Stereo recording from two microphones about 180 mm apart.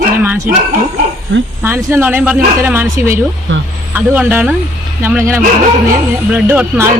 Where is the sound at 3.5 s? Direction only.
90° right.